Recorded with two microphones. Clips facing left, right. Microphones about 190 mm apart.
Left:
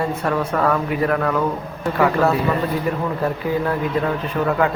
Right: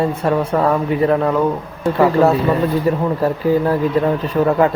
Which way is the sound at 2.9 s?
35° right (ahead or behind).